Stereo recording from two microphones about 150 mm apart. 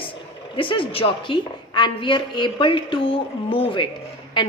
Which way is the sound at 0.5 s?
35° left (ahead or behind).